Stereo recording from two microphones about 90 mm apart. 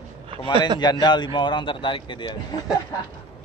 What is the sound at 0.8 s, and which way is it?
A man's voice, 55° left (ahead or behind).